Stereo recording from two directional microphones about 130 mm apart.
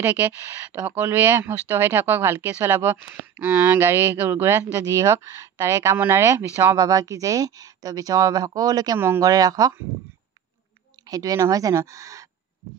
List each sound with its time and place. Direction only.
0.0 s speech: 15° right (ahead or behind); by 9.0 s 30° right (ahead or behind)
9.0 s speech: 15° right (ahead or behind)
9.3 s speech: 30° right (ahead or behind)
11.1 s speech: 30° right (ahead or behind)